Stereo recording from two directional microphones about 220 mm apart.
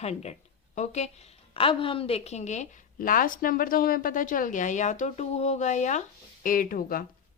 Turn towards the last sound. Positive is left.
turn(degrees=40)  # may be behind; listen again after turning